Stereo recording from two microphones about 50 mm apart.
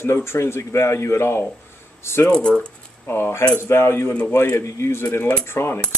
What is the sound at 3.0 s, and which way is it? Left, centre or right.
Speech, left.